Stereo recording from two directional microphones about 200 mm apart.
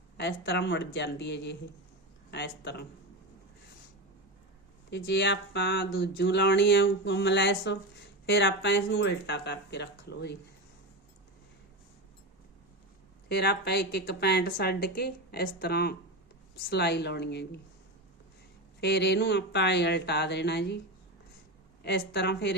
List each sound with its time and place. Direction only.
0.2 s speech: 55° left (ahead or behind)
4.9 s speech: 60° left (ahead or behind)
13.2 s speech: 55° left (ahead or behind)
18.8 s speech: 55° left (ahead or behind)
21.8 s speech: 55° left (ahead or behind)